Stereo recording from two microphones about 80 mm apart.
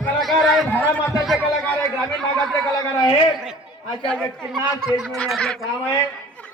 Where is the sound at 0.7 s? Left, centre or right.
Left.